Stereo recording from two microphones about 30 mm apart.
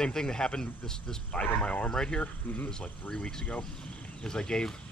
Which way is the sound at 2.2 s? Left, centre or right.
Left.